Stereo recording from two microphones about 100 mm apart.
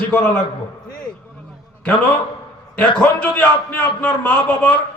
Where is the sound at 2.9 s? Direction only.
10° left (ahead or behind).